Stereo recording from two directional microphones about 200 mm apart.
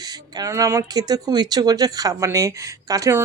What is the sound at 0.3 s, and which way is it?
Speech, 15° right (ahead or behind).